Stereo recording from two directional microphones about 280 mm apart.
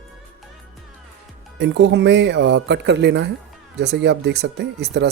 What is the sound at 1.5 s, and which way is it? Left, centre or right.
Speech, right.